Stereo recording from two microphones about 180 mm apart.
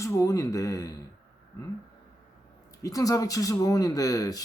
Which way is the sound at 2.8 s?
20° left (ahead or behind).